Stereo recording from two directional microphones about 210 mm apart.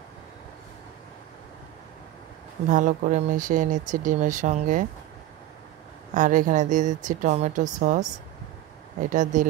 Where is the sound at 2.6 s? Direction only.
40° right (ahead or behind).